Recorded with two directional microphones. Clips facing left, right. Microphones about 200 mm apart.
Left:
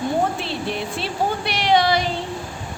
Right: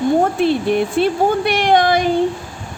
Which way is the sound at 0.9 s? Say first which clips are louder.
Right 9 dB; 50° right (ahead or behind).